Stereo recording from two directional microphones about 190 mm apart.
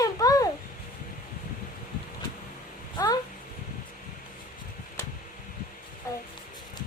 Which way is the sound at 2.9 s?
20° left (ahead or behind).